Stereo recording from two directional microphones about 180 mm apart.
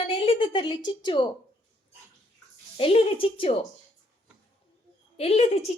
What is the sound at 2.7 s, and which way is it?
Speech, 35° left (ahead or behind).